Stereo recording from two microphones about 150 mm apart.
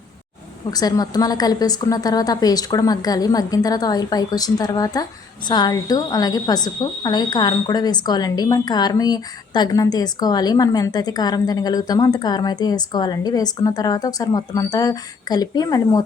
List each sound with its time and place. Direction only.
0.7 s a woman's voice: 25° left (ahead or behind)